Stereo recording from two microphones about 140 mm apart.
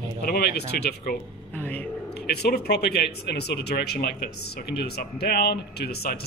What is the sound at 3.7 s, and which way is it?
Speech, 90° left.